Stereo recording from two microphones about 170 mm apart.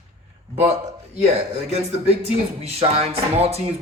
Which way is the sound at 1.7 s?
35° right (ahead or behind).